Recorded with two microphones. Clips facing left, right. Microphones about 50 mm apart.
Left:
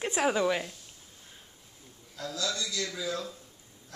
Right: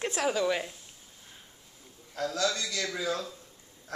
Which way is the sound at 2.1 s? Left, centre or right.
Right.